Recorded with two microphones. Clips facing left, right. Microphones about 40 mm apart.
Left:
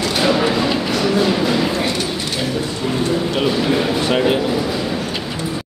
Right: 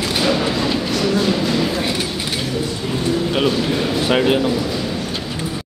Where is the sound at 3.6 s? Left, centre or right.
Centre.